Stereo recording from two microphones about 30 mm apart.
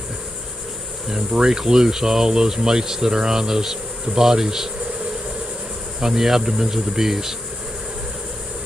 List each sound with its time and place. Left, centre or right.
1.3 s speech: right
5.9 s speech: centre